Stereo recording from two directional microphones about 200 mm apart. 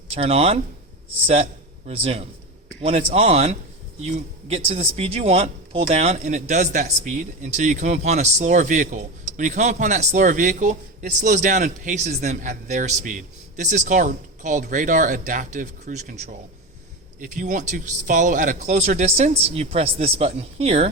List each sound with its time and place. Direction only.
0.1 s speech: 30° right (ahead or behind)
1.9 s speech: 30° right (ahead or behind)